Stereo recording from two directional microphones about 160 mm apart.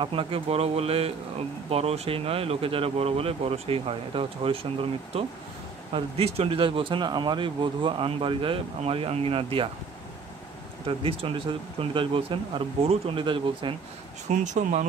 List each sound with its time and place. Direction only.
0.0 s speech: 35° right (ahead or behind)
10.9 s speech: 35° right (ahead or behind)
14.3 s speech: 50° right (ahead or behind)